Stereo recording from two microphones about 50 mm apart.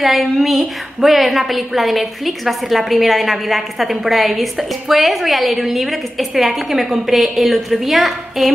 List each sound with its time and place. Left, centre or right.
0.0 s a woman's voice: centre